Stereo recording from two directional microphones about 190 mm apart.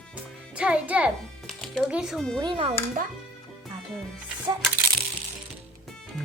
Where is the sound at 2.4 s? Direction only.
30° right (ahead or behind).